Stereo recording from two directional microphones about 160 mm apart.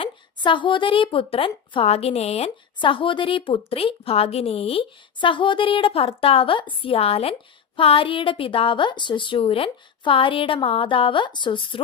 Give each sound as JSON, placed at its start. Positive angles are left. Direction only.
{"t": 0.0, "sound": "speech", "side_deg": 30}